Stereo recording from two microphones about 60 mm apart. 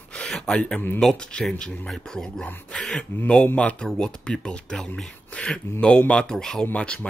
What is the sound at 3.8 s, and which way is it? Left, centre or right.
Speech, centre.